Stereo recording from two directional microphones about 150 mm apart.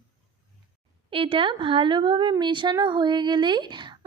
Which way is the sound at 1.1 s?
35° right (ahead or behind).